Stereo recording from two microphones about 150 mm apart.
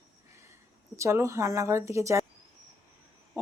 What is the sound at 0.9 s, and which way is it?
Speech, 20° right (ahead or behind).